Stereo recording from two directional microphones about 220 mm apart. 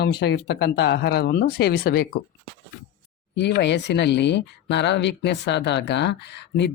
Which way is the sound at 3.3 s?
50° left (ahead or behind).